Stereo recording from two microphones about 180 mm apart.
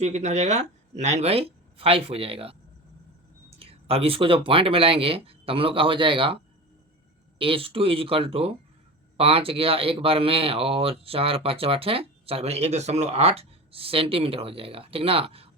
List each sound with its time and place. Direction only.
0.0 s speech: 40° right (ahead or behind)
3.6 s speech: 35° right (ahead or behind)